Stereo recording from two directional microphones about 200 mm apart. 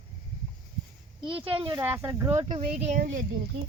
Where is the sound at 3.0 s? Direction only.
60° right (ahead or behind).